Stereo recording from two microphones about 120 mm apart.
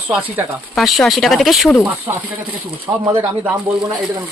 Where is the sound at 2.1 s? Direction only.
40° right (ahead or behind).